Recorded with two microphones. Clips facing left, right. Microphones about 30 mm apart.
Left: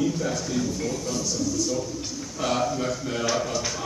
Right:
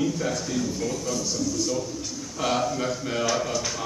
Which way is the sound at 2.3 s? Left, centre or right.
Centre.